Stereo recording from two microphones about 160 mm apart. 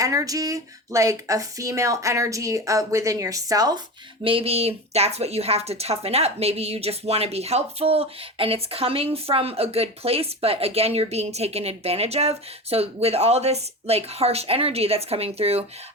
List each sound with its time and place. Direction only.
0.0 s speech: 20° right (ahead or behind)
4.2 s speech: 35° right (ahead or behind)